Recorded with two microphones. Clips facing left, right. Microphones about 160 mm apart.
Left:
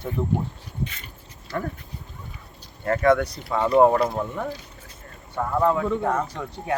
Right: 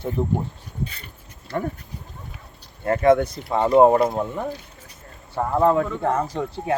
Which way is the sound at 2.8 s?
20° right (ahead or behind).